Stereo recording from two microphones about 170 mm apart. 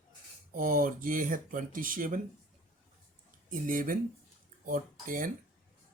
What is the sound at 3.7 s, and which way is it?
Speech, 55° right (ahead or behind).